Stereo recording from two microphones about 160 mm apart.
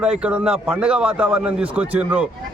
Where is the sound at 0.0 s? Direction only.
5° right (ahead or behind).